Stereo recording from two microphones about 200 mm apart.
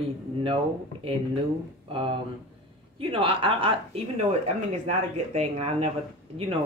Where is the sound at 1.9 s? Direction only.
25° right (ahead or behind).